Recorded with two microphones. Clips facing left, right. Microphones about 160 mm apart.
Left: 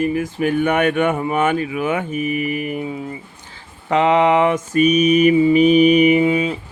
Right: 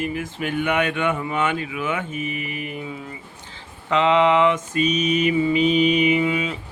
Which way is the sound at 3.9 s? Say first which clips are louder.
Left 3 dB; 45° left (ahead or behind).